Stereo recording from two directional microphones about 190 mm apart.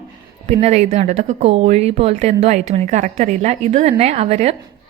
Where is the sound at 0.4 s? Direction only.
35° right (ahead or behind).